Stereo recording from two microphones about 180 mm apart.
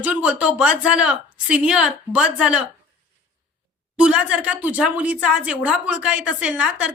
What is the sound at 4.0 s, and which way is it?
A woman's voice, 5° right (ahead or behind).